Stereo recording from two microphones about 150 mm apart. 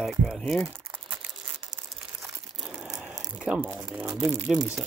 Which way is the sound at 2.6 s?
5° right (ahead or behind).